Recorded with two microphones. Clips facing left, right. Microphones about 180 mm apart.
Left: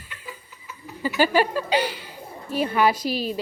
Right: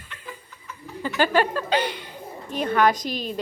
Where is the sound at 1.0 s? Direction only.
10° left (ahead or behind).